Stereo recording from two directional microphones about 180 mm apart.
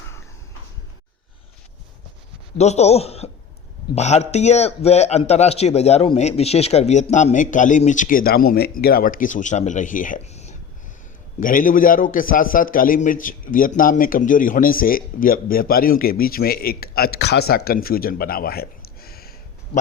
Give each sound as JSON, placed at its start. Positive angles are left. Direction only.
{"t": 2.6, "sound": "a man's voice", "side_deg": 40}
{"t": 11.3, "sound": "a man's voice", "side_deg": 50}